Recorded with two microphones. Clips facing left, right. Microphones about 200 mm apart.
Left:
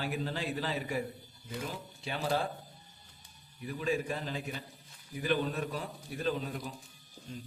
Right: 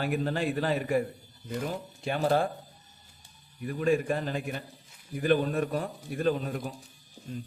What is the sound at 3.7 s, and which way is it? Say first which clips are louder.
A man's voice: right 7 dB; 55° right (ahead or behind).